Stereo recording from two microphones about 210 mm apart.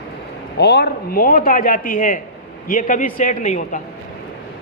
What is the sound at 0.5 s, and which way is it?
Speech, 50° left (ahead or behind).